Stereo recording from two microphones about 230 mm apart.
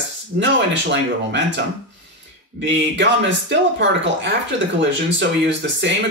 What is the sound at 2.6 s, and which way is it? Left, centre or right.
Speech, right.